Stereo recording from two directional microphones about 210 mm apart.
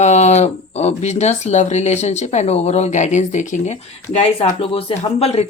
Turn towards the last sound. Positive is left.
turn(degrees=30)  # may be behind; listen again after turning